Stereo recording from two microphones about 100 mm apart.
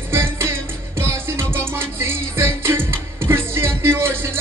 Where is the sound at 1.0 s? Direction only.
25° right (ahead or behind).